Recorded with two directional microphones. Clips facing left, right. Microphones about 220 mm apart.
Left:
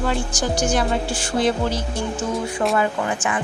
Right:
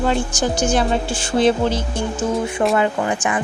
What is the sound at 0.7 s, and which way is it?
Speech, 25° right (ahead or behind).